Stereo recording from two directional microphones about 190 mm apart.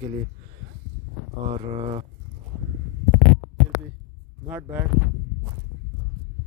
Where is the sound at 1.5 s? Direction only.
30° right (ahead or behind).